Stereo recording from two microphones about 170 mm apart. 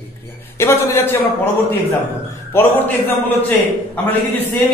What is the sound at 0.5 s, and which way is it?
Speech, 15° left (ahead or behind).